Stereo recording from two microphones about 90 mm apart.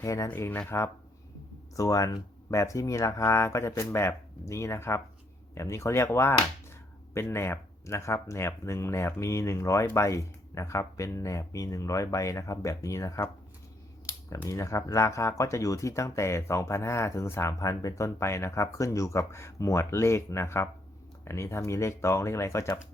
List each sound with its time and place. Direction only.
0.0 s speech: 35° left (ahead or behind)
0.3 s speech: 25° left (ahead or behind)
1.7 s speech: 40° left (ahead or behind)
14.3 s speech: 35° left (ahead or behind)